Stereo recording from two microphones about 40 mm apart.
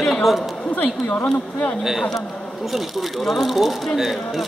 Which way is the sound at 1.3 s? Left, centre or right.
Left.